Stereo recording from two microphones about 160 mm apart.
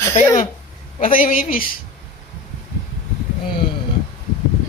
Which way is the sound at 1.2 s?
60° left (ahead or behind).